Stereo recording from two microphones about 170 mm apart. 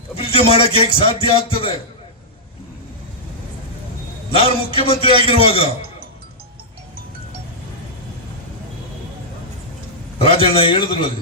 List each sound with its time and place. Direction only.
0.2 s a man's voice: 35° left (ahead or behind)
4.3 s a man's voice: 35° left (ahead or behind)
10.2 s a man's voice: 35° left (ahead or behind)